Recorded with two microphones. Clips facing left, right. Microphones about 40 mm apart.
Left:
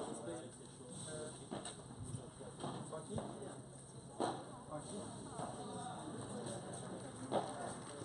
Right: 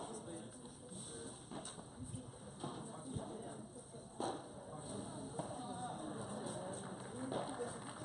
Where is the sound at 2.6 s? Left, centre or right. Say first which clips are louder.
Left 1 dB; centre.